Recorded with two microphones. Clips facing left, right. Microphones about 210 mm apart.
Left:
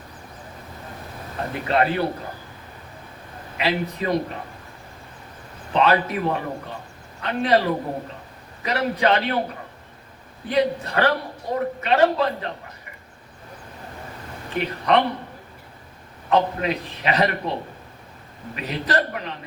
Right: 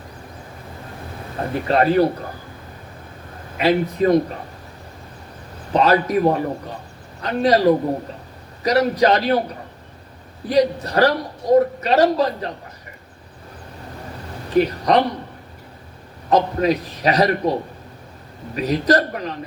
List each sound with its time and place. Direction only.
1.6 s a man's voice: 40° right (ahead or behind)
3.6 s speech: 45° right (ahead or behind)
5.7 s a man's voice: 40° right (ahead or behind)
10.5 s a man's voice: 40° right (ahead or behind)
14.5 s a man's voice: 40° right (ahead or behind)
16.3 s a man's voice: 40° right (ahead or behind)